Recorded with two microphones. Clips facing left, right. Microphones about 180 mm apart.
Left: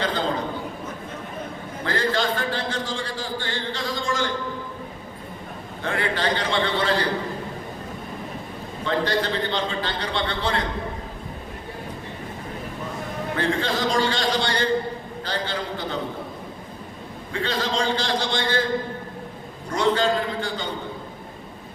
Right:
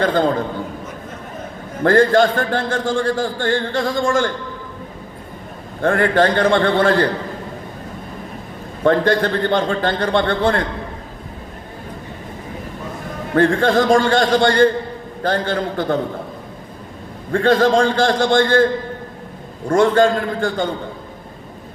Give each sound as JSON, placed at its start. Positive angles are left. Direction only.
{"t": 0.0, "sound": "a man's voice", "side_deg": -50}
{"t": 1.8, "sound": "a man's voice", "side_deg": -50}
{"t": 5.8, "sound": "a man's voice", "side_deg": -50}
{"t": 8.8, "sound": "a man's voice", "side_deg": -50}
{"t": 13.3, "sound": "a man's voice", "side_deg": -50}
{"t": 17.3, "sound": "a man's voice", "side_deg": -50}